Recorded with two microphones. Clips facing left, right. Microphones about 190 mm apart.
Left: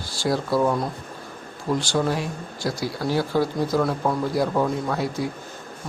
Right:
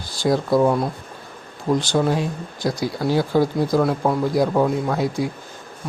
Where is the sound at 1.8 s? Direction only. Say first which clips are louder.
Right 3 dB; 20° right (ahead or behind).